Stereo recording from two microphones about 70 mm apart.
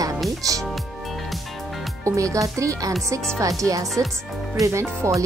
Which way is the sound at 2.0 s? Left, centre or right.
Right.